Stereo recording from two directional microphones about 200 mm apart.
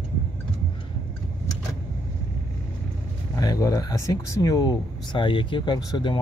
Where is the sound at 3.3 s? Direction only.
15° left (ahead or behind).